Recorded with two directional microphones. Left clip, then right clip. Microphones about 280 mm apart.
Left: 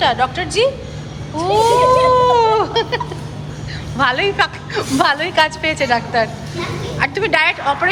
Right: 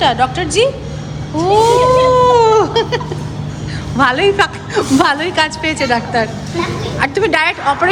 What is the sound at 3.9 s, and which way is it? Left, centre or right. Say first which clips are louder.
A woman's voice: right 4 dB; centre.